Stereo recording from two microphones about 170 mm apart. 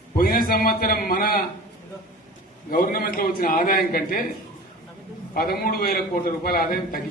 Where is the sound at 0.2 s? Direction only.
60° left (ahead or behind).